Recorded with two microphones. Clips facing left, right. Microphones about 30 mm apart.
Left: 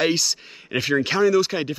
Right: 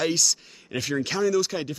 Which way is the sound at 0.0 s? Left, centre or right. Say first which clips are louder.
Left 3 dB; left.